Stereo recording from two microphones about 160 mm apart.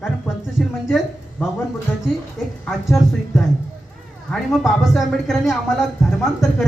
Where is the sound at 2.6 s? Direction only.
Centre (ahead or behind).